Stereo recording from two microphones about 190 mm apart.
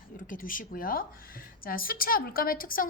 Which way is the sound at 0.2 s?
45° left (ahead or behind).